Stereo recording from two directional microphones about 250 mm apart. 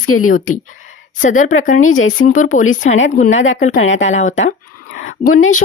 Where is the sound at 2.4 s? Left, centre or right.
Left.